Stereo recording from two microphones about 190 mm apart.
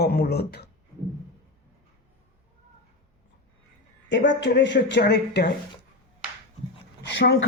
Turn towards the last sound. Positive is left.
turn(degrees=65)  # may be behind; listen again after turning